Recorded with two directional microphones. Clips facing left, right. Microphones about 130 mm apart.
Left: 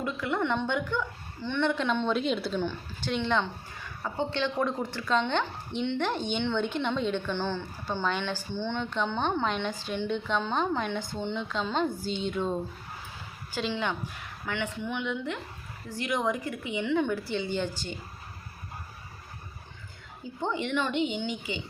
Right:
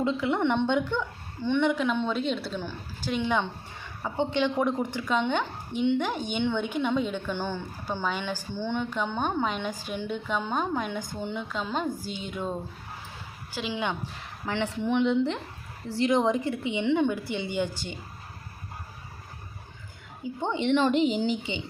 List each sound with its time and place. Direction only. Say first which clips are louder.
0.0 s a woman's voice: right 4 dB; 20° right (ahead or behind)
14.4 s a woman's voice: right 4 dB; 30° right (ahead or behind); by 17.9 s 15° right (ahead or behind)
20.4 s a woman's voice: right 5 dB; 20° right (ahead or behind)